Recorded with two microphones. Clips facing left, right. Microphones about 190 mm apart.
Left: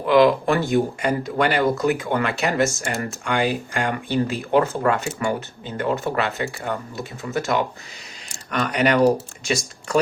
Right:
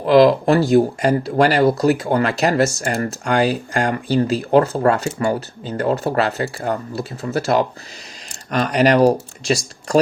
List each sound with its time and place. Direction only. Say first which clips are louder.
0.0 s speech: right 4 dB; 35° right (ahead or behind)